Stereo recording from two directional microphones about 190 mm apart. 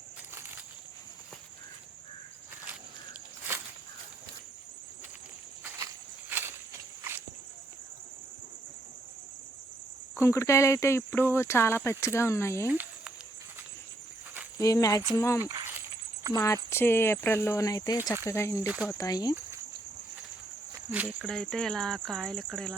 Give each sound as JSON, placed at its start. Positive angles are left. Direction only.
{"t": 2.6, "sound": "walk", "side_deg": -10}
{"t": 5.8, "sound": "walk", "side_deg": -10}
{"t": 10.2, "sound": "speech", "side_deg": 15}
{"t": 12.6, "sound": "cricket", "side_deg": -10}
{"t": 14.6, "sound": "speech", "side_deg": 20}
{"t": 15.4, "sound": "speech", "side_deg": -15}
{"t": 16.3, "sound": "speech", "side_deg": 15}
{"t": 18.6, "sound": "speech", "side_deg": -5}
{"t": 18.9, "sound": "cricket", "side_deg": 20}
{"t": 21.2, "sound": "speech", "side_deg": 5}